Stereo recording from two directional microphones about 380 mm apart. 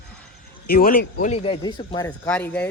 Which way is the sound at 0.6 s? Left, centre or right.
Left.